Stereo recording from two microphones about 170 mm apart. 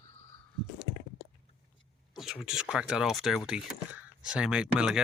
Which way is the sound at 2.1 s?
Centre (ahead or behind).